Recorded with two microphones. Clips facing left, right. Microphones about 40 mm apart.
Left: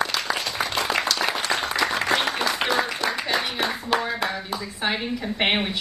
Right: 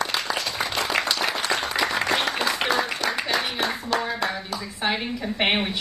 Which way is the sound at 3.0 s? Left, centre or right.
Left.